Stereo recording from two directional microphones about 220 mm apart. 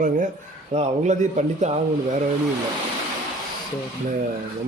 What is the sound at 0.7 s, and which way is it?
A man's voice, 30° right (ahead or behind).